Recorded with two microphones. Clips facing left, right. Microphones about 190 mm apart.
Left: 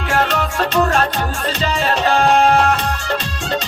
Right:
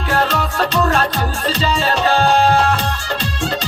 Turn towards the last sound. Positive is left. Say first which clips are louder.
# left 1 dB
turn(degrees=-35)  # may be behind; listen again after turning